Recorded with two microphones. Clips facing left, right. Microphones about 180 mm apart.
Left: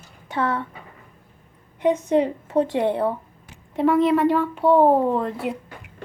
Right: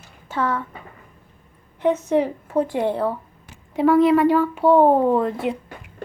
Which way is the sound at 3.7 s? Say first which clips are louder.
Right 3 dB; centre (ahead or behind).